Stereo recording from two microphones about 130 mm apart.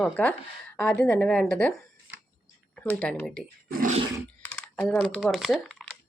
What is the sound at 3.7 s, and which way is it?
Roar, 90° right.